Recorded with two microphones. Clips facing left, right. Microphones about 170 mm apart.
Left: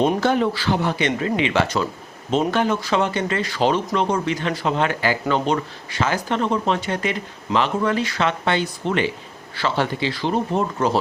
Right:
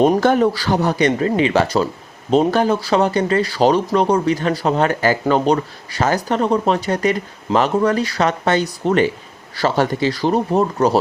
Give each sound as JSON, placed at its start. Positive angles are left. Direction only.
{"t": 0.0, "sound": "speech", "side_deg": -45}